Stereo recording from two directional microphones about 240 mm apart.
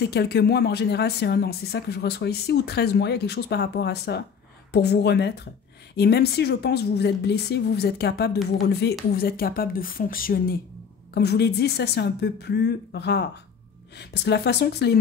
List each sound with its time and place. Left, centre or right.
0.0 s speech: left